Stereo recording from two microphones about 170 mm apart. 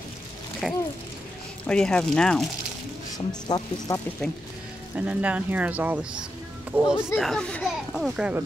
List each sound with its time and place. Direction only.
0.6 s speech: 5° right (ahead or behind)
3.4 s speech: 25° left (ahead or behind)
4.9 s speech: 10° right (ahead or behind)
7.2 s speech: 5° left (ahead or behind)